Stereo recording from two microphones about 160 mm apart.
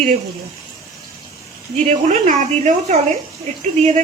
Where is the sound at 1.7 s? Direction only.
45° right (ahead or behind).